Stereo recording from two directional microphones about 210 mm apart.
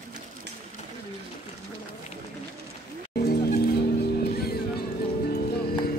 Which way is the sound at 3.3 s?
50° left (ahead or behind).